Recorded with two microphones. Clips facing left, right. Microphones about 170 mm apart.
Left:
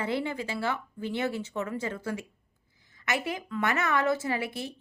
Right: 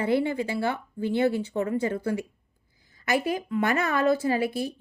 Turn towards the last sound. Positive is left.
turn(degrees=25)  # may be behind; listen again after turning